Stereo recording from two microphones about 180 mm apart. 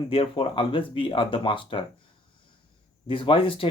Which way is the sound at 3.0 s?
30° left (ahead or behind).